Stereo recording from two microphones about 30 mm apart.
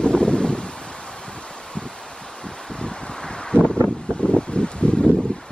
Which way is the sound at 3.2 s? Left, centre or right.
Left.